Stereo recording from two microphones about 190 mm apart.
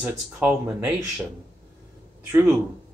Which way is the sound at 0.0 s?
5° right (ahead or behind).